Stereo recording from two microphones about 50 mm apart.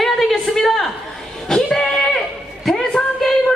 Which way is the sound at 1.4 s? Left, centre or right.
Centre.